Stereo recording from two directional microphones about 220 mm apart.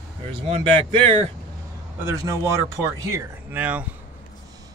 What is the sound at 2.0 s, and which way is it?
Speech, 10° right (ahead or behind).